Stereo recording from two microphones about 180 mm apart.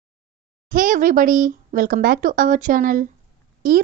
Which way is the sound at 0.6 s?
50° right (ahead or behind).